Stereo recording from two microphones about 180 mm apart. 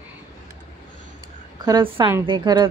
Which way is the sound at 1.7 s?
25° right (ahead or behind).